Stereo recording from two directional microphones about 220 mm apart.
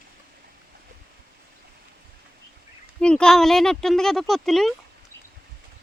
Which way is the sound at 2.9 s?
5° left (ahead or behind).